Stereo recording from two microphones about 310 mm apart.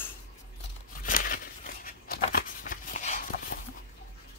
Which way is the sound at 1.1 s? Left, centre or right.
Left.